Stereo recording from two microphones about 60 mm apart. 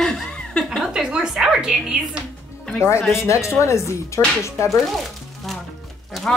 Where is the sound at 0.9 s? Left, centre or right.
Centre.